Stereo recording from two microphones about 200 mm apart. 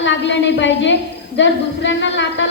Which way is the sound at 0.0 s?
65° left (ahead or behind).